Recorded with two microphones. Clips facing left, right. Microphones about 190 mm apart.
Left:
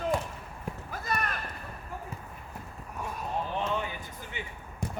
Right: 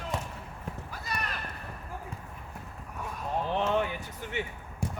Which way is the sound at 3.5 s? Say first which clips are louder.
Right 4 dB; 70° right (ahead or behind).